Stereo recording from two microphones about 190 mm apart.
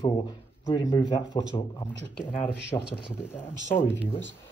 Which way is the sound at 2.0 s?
70° left (ahead or behind).